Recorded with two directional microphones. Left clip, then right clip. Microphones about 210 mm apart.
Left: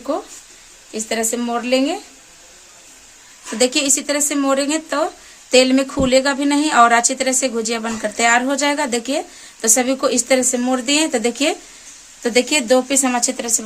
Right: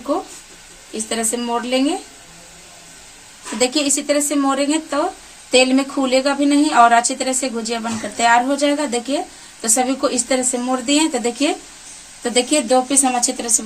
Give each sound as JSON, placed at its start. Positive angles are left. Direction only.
{"t": 0.9, "sound": "a woman's voice", "side_deg": 35}
{"t": 3.8, "sound": "a woman's voice", "side_deg": 40}